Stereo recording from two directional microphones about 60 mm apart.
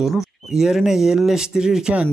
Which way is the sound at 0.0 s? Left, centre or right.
Centre.